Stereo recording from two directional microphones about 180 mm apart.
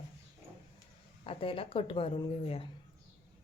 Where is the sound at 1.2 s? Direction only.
30° left (ahead or behind).